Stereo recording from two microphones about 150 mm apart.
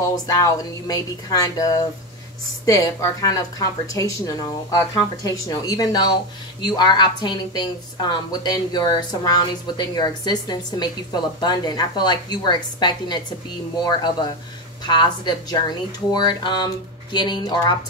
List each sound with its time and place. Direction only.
0.0 s a woman's voice: 25° left (ahead or behind)
5.2 s a woman's voice: 25° left (ahead or behind)